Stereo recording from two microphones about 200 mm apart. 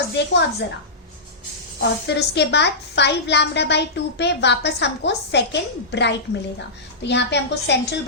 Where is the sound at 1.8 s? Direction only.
60° left (ahead or behind).